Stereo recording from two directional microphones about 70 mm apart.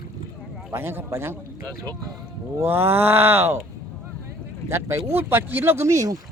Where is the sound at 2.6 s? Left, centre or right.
Right.